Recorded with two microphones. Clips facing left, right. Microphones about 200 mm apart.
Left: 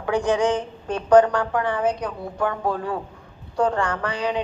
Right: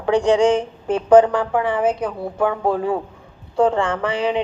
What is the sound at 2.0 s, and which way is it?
Speech, 5° right (ahead or behind).